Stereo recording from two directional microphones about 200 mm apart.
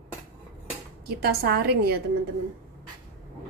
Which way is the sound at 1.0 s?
50° right (ahead or behind).